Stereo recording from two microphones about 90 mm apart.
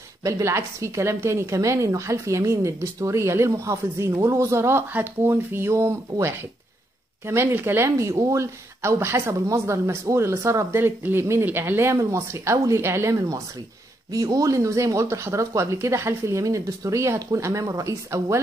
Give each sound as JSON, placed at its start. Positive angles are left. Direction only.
{"t": 0.2, "sound": "a woman's voice", "side_deg": -30}